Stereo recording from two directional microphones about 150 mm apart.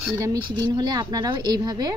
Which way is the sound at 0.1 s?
20° right (ahead or behind).